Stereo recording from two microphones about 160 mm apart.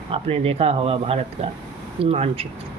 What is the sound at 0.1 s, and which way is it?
Speech, 40° right (ahead or behind).